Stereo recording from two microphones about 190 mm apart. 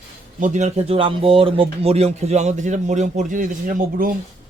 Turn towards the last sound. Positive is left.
turn(degrees=-45)  # may be behind; listen again after turning